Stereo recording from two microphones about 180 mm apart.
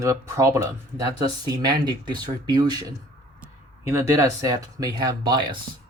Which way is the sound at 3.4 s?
15° right (ahead or behind).